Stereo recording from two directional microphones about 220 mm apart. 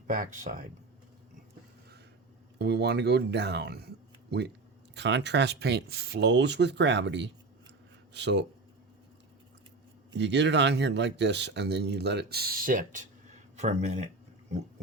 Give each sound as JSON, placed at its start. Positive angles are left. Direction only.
{"t": 0.1, "sound": "speech", "side_deg": -40}
{"t": 2.6, "sound": "speech", "side_deg": -50}
{"t": 10.1, "sound": "speech", "side_deg": -50}